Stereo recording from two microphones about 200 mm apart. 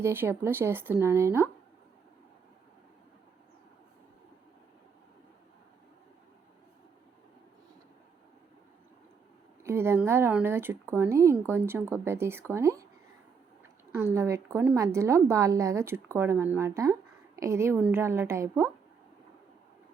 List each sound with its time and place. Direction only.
0.0 s a woman's voice: 10° right (ahead or behind)
9.6 s a woman's voice: 15° right (ahead or behind)
13.9 s a woman's voice: 10° right (ahead or behind)